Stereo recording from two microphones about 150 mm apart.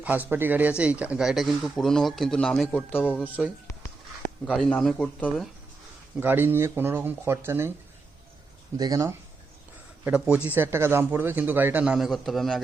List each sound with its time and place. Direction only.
0.0 s speech: 10° right (ahead or behind)
3.2 s a man's voice: 10° right (ahead or behind)
4.4 s speech: 5° left (ahead or behind)
6.1 s a man's voice: 15° right (ahead or behind)
8.8 s speech: 25° right (ahead or behind)
10.0 s a man's voice: 10° right (ahead or behind)